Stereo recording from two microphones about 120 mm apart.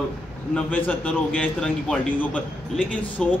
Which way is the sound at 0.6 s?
15° left (ahead or behind).